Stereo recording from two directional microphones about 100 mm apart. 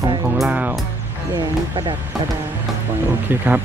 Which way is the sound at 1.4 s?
45° right (ahead or behind).